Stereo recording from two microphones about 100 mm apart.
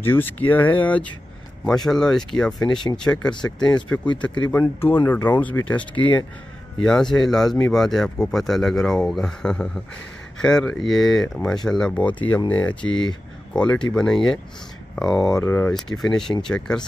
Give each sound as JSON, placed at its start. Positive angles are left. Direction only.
{"t": 0.0, "sound": "speech", "side_deg": 20}
{"t": 15.4, "sound": "speech", "side_deg": 20}
{"t": 15.7, "sound": "speech", "side_deg": 5}